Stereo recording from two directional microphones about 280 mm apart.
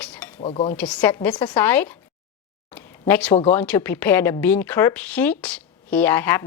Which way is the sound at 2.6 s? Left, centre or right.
Centre.